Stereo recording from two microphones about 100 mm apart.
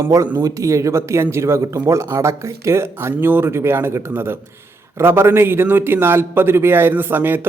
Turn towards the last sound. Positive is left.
turn(degrees=-20)  # may be behind; listen again after turning